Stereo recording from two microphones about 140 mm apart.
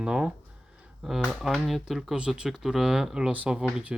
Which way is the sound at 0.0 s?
5° right (ahead or behind).